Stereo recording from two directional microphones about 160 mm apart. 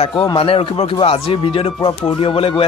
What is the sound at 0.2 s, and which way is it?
Speech, 35° left (ahead or behind).